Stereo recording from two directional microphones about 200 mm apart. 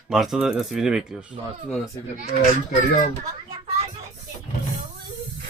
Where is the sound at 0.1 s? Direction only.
Centre (ahead or behind).